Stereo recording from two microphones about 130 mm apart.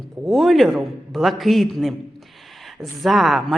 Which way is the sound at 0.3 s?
Centre (ahead or behind).